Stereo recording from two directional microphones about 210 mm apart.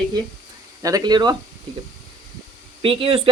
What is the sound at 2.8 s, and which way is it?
Speech, 25° right (ahead or behind).